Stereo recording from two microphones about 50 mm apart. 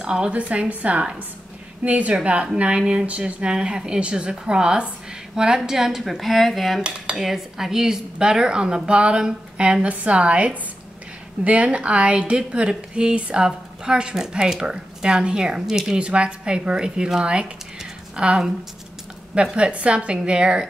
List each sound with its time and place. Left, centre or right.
0.0 s a woman's voice: centre